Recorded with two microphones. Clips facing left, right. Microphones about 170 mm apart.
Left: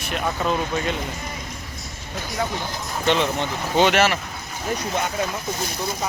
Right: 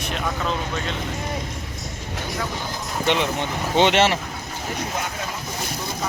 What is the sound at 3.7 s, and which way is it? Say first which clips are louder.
Speech: even; 25° right (ahead or behind).